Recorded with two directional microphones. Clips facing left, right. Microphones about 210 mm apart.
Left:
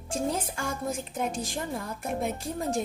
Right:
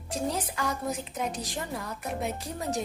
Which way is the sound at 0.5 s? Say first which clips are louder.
Right 1 dB; 50° left (ahead or behind).